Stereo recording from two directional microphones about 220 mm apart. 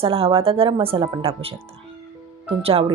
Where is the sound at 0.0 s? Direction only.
25° right (ahead or behind).